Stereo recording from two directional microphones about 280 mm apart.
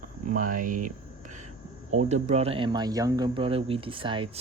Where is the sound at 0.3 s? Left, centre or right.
Right.